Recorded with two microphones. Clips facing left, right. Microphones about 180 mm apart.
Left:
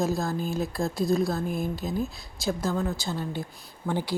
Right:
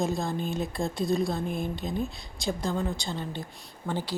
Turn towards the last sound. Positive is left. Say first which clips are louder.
# left 3 dB
turn(degrees=10)  # may be behind; listen again after turning